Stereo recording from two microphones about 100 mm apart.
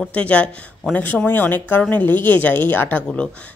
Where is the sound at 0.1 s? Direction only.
15° left (ahead or behind).